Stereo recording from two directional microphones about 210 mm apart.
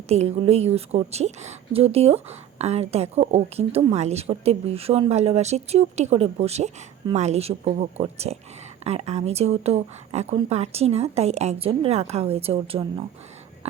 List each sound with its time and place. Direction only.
0.1 s a woman's voice: 30° right (ahead or behind)